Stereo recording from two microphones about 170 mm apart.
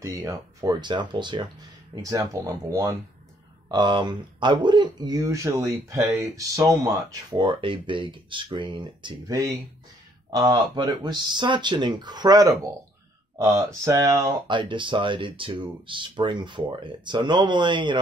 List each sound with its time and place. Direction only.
0.0 s speech: 20° right (ahead or behind)
14.5 s speech: 30° right (ahead or behind)